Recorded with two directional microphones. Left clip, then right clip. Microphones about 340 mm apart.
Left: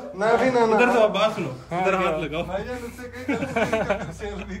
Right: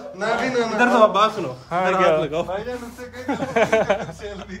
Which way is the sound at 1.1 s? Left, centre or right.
Centre.